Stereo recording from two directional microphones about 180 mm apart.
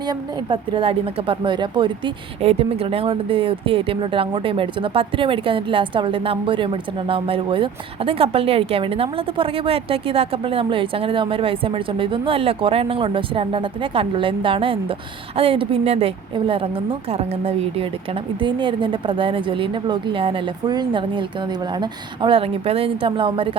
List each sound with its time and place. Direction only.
0.1 s a woman's voice: 25° right (ahead or behind)